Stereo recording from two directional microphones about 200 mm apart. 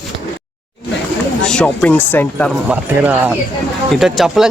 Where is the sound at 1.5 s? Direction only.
5° left (ahead or behind).